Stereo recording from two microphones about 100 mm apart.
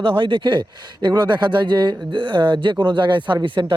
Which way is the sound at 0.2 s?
55° right (ahead or behind).